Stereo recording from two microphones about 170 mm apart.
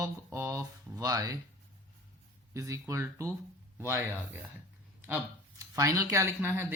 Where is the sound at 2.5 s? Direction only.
15° right (ahead or behind).